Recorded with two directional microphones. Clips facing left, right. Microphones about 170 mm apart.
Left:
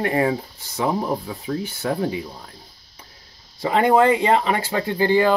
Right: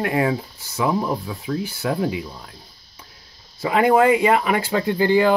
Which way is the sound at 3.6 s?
30° left (ahead or behind).